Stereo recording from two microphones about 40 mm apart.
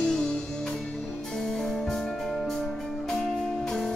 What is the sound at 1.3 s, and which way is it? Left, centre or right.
Music, centre.